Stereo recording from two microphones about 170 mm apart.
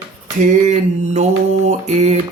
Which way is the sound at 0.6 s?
40° right (ahead or behind).